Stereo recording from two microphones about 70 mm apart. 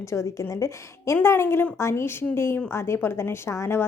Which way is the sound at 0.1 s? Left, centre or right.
Left.